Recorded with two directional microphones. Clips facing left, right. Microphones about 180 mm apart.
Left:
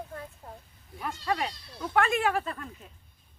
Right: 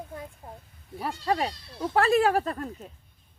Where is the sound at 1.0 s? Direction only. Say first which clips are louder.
Right 3 dB; 35° right (ahead or behind).